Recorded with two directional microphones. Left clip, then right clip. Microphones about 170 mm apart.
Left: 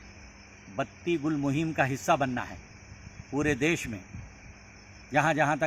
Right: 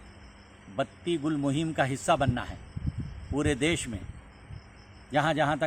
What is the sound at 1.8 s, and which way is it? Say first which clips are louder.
Speech: even; 10° right (ahead or behind).